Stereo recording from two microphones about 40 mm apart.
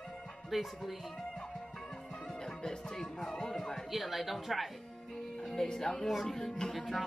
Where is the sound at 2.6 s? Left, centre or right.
Centre.